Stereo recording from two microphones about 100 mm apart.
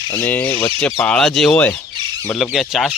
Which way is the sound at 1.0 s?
5° left (ahead or behind).